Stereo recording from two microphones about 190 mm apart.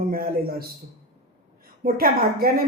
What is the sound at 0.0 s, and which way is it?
Speech, 50° right (ahead or behind).